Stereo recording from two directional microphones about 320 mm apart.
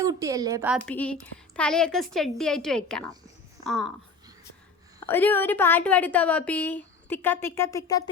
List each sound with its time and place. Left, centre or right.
0.0 s a woman's voice: centre
5.0 s a woman's voice: centre